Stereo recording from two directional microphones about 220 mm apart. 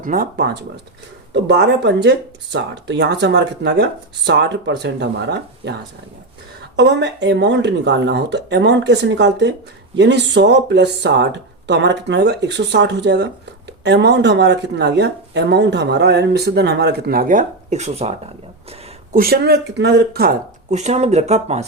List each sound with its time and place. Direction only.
0.0 s speech: 40° right (ahead or behind)
6.7 s speech: 55° right (ahead or behind); by 18.2 s 30° right (ahead or behind)
19.1 s speech: 45° right (ahead or behind)
20.7 s speech: 30° right (ahead or behind)